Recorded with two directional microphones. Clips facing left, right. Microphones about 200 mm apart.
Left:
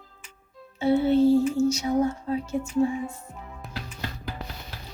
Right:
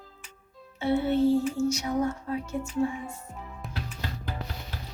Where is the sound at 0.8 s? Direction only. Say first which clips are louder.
Left 4 dB; 25° left (ahead or behind).